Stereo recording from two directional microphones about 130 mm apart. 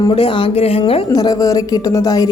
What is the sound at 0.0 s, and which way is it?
Speech, 40° left (ahead or behind).